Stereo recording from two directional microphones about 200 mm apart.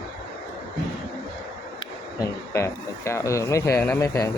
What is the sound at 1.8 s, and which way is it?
Speech, 15° left (ahead or behind).